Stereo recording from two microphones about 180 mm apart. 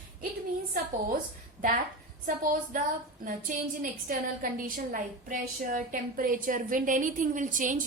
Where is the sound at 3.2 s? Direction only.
50° right (ahead or behind).